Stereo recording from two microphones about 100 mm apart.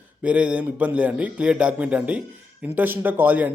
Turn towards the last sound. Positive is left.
turn(degrees=-20)  # may be behind; listen again after turning